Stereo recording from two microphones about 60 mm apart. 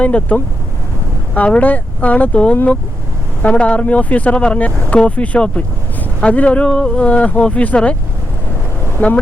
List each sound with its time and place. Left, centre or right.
0.0 s speech: left
9.0 s speech: left